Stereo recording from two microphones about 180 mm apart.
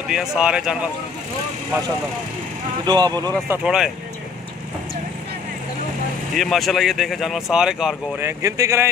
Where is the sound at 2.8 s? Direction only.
25° right (ahead or behind).